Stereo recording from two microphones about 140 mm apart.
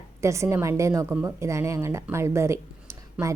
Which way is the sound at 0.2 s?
20° right (ahead or behind).